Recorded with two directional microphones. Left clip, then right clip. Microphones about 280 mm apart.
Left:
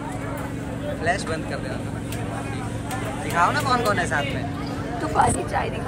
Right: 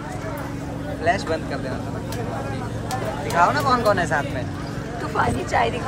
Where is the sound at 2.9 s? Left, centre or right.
Right.